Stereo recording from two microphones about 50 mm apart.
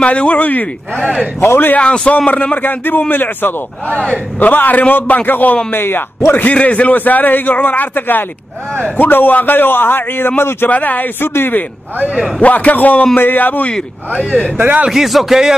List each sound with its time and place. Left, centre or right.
0.0 s a man's voice: left
1.8 s a man's voice: left
5.7 s a man's voice: left
6.3 s a man's voice: left
10.7 s a man's voice: left
11.1 s a man's voice: left
13.7 s speech: left
14.6 s speech: right
14.9 s speech: centre